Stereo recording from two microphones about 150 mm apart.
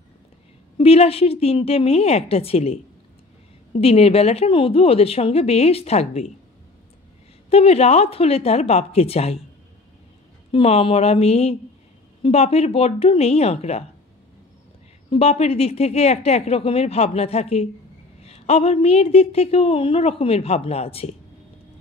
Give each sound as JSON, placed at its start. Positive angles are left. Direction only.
{"t": 0.7, "sound": "a woman's voice", "side_deg": 40}
{"t": 3.8, "sound": "a woman's voice", "side_deg": 40}
{"t": 7.4, "sound": "a woman's voice", "side_deg": 40}
{"t": 10.5, "sound": "a woman's voice", "side_deg": 40}
{"t": 15.0, "sound": "a woman's voice", "side_deg": 40}